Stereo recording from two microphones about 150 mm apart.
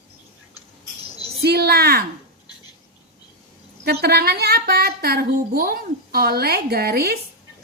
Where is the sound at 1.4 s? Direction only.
90° right.